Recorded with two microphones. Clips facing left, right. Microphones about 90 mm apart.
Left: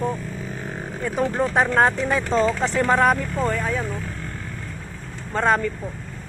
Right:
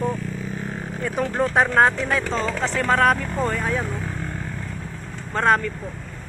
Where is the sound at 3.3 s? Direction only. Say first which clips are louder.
Even; 5° right (ahead or behind).